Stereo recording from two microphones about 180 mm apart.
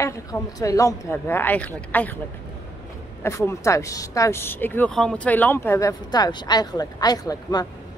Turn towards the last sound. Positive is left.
turn(degrees=20)  # may be behind; listen again after turning